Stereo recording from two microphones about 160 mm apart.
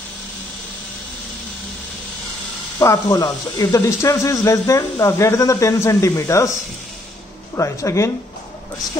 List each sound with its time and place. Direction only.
2.8 s speech: 20° left (ahead or behind)
7.5 s speech: 20° left (ahead or behind)